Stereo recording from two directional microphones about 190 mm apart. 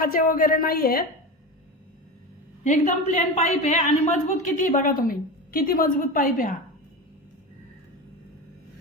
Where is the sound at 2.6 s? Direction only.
40° left (ahead or behind).